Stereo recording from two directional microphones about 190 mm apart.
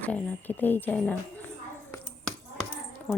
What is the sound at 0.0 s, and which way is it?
Speech, 10° left (ahead or behind).